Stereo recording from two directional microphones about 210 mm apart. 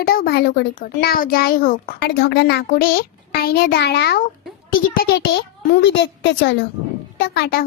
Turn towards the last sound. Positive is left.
turn(degrees=50)  # may be behind; listen again after turning